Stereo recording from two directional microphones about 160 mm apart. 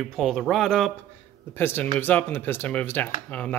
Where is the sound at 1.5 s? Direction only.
15° left (ahead or behind).